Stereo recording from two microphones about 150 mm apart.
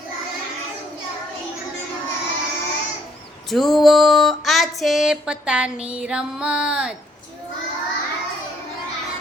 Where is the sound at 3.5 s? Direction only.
Centre (ahead or behind).